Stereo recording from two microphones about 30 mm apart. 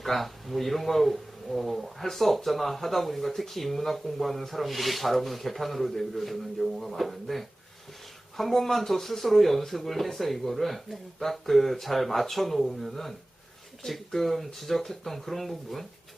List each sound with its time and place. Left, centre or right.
0.0 s speech: centre